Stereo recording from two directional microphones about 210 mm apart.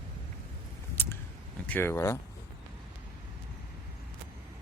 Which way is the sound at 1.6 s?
10° left (ahead or behind).